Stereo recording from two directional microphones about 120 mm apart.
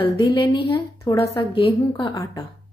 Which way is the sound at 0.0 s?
40° left (ahead or behind).